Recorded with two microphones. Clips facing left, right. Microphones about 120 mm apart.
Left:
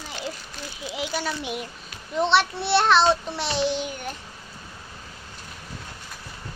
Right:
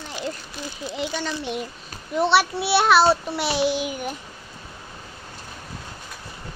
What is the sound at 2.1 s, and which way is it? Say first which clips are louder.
A child's voice: right 2 dB; 5° right (ahead or behind).